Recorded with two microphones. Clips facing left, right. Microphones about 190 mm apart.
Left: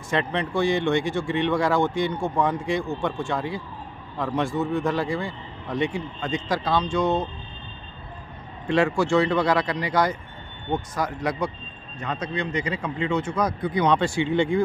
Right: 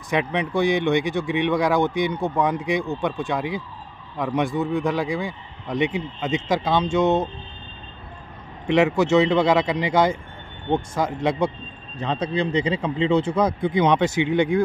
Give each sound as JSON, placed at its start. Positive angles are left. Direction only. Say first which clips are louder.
{"t": 0.1, "sound": "speech", "louder": "right 2 dB", "side_deg": -15}
{"t": 8.6, "sound": "speech", "louder": "right 3 dB", "side_deg": -20}